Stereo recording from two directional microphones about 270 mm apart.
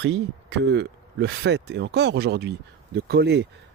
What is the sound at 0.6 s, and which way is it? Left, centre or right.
Speech, right.